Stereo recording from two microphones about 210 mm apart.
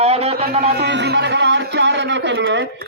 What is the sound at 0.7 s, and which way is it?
A man's voice, 50° right (ahead or behind).